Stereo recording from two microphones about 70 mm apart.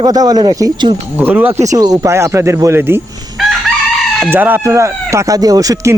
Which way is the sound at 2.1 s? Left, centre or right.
Right.